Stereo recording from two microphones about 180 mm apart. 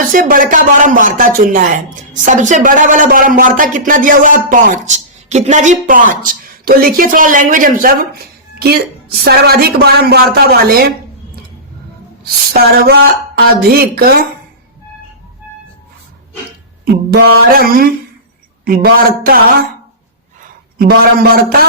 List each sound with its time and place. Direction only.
0.1 s speech: 50° right (ahead or behind)
8.5 s a woman's voice: 60° right (ahead or behind)
12.2 s a woman's voice: 60° right (ahead or behind)
16.8 s a woman's voice: 60° right (ahead or behind)
20.7 s a woman's voice: 55° right (ahead or behind)